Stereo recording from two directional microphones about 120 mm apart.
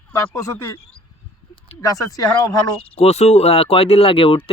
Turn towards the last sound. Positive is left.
turn(degrees=50)  # may be behind; listen again after turning